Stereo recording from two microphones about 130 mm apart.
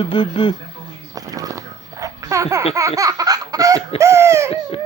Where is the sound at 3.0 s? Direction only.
25° right (ahead or behind).